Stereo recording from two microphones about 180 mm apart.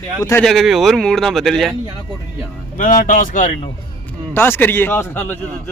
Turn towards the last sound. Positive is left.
turn(degrees=10)  # may be behind; listen again after turning